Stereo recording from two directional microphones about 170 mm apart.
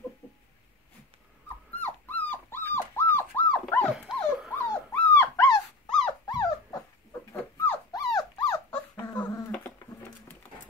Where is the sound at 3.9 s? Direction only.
Centre (ahead or behind).